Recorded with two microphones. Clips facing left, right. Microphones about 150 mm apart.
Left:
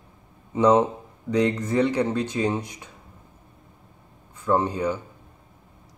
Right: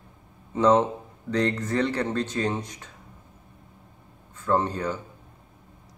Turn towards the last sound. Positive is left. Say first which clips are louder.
# left 2 dB
turn(degrees=10)  # may be behind; listen again after turning